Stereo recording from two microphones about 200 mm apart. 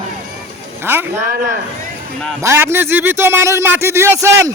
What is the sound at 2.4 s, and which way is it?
A man's voice, 15° right (ahead or behind).